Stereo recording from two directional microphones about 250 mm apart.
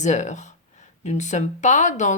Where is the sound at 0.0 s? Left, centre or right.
Left.